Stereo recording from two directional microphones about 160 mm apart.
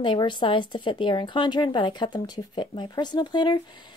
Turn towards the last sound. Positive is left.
turn(degrees=30)  # may be behind; listen again after turning